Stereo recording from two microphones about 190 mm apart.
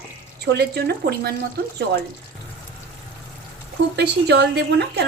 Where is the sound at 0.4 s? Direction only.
55° right (ahead or behind).